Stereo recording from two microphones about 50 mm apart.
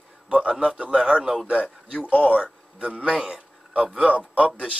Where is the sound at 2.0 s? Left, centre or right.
Left.